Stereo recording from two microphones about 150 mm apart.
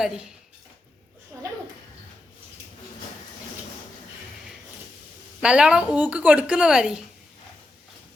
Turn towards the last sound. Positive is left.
turn(degrees=-5)  # may be behind; listen again after turning